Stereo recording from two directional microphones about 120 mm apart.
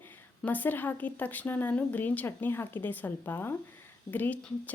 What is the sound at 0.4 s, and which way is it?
A woman's voice, 15° left (ahead or behind).